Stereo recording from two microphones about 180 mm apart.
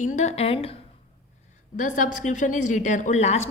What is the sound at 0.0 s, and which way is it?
Speech, 40° left (ahead or behind).